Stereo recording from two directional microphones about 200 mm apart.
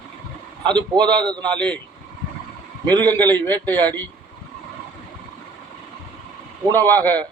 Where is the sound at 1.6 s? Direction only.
5° left (ahead or behind).